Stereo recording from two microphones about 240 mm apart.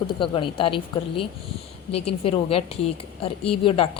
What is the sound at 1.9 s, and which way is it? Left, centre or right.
A woman's voice, left.